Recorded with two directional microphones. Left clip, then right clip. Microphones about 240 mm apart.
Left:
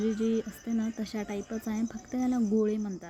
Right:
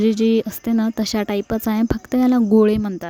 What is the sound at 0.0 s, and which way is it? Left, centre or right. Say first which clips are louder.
Speech: right 12 dB; right.